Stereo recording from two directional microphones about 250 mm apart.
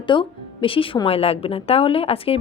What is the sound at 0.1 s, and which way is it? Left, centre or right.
A woman's voice, centre.